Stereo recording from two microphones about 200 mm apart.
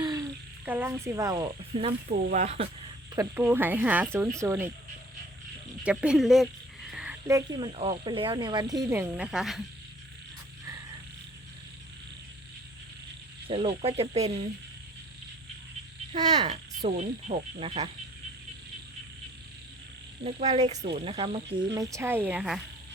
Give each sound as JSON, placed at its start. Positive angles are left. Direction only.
{"t": 0.0, "sound": "a sound", "side_deg": -20}
{"t": 0.6, "sound": "speech", "side_deg": -10}
{"t": 2.0, "sound": "insect", "side_deg": -35}
{"t": 3.2, "sound": "speech", "side_deg": -10}
{"t": 5.8, "sound": "speech", "side_deg": -5}
{"t": 6.9, "sound": "a sound", "side_deg": -5}
{"t": 7.3, "sound": "speech", "side_deg": -20}
{"t": 13.5, "sound": "speech", "side_deg": -30}
{"t": 16.5, "sound": "insect", "side_deg": -35}
{"t": 20.2, "sound": "insect", "side_deg": -35}
{"t": 20.9, "sound": "speech", "side_deg": -30}
{"t": 21.7, "sound": "speech", "side_deg": -15}